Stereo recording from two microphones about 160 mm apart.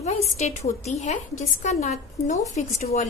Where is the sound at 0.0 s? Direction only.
45° left (ahead or behind).